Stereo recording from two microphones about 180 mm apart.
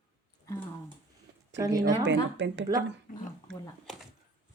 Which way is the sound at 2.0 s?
80° right.